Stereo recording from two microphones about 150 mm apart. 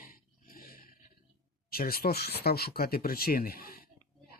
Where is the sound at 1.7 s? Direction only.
90° left.